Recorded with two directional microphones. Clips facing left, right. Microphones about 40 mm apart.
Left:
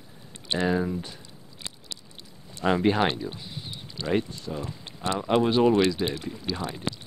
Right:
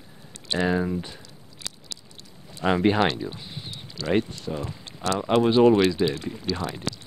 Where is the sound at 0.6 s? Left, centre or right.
Right.